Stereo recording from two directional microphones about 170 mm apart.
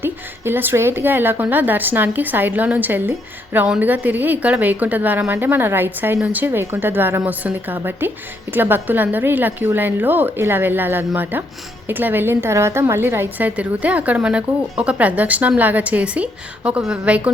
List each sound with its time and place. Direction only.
0.0 s a woman's voice: 10° right (ahead or behind)